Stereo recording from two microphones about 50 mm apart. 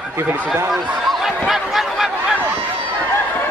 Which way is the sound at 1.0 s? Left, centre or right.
Centre.